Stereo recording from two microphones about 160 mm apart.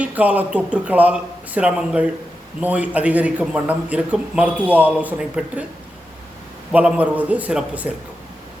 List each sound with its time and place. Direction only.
0.0 s a man's voice: 10° right (ahead or behind)
6.7 s a man's voice: 5° right (ahead or behind)